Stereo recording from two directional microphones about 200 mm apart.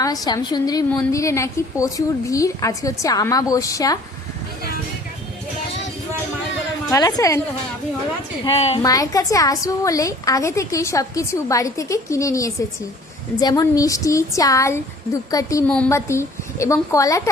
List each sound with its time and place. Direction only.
0.0 s a woman's voice: 15° left (ahead or behind)
6.9 s a woman's voice: 15° left (ahead or behind)
8.4 s a woman's voice: 30° left (ahead or behind)
8.8 s a woman's voice: 15° left (ahead or behind)